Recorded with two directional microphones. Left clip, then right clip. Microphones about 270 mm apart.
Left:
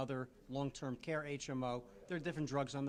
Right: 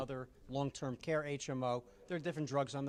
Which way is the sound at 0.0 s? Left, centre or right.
Centre.